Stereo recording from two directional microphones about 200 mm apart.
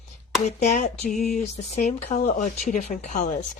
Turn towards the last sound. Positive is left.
turn(degrees=40)  # may be behind; listen again after turning